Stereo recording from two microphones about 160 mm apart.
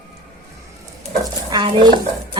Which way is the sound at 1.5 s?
30° right (ahead or behind).